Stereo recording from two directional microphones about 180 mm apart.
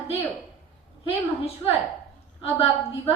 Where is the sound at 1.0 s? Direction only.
35° left (ahead or behind).